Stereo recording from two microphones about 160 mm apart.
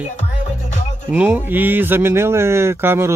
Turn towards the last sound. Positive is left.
turn(degrees=-15)  # may be behind; listen again after turning